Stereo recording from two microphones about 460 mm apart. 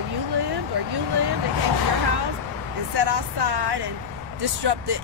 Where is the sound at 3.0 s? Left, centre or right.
Right.